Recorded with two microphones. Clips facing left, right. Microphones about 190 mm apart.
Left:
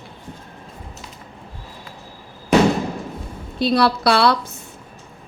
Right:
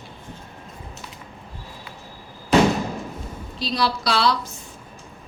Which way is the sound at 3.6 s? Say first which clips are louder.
Left 7 dB; 60° left (ahead or behind).